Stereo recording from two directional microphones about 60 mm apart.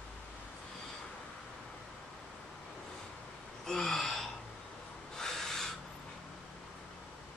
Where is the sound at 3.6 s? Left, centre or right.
Centre.